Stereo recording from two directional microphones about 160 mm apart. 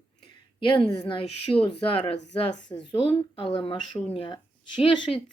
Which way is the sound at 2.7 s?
20° left (ahead or behind).